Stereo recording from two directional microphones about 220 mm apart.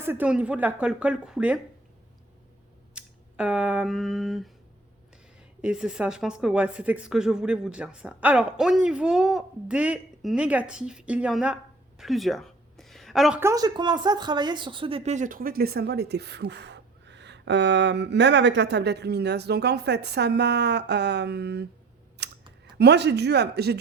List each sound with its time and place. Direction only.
0.0 s a woman's voice: 10° right (ahead or behind)
2.9 s speech: 5° right (ahead or behind)
5.6 s speech: 5° right (ahead or behind); by 21.7 s 45° right (ahead or behind)
22.2 s a sound: 50° right (ahead or behind)
22.8 s speech: 50° right (ahead or behind)